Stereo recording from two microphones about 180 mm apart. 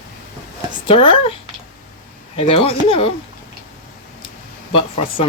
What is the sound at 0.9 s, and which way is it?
Speech, 30° left (ahead or behind).